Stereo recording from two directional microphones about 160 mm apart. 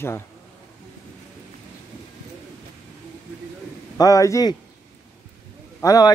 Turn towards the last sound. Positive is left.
turn(degrees=20)  # may be behind; listen again after turning